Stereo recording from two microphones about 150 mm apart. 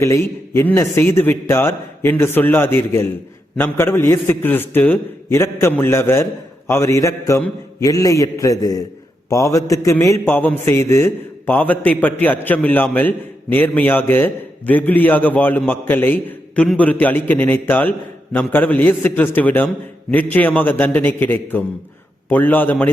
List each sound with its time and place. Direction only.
0.0 s a man's voice: 20° left (ahead or behind)